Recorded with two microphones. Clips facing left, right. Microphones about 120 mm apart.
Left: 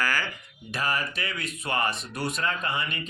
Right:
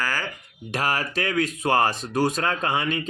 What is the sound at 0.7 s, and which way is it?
A man's voice, 90° right.